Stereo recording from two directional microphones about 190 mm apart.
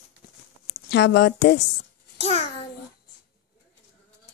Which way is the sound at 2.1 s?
35° left (ahead or behind).